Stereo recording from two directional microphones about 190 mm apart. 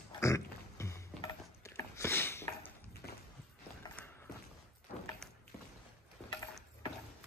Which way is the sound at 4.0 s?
5° left (ahead or behind).